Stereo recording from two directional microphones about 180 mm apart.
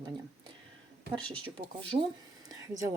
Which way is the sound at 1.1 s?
25° right (ahead or behind).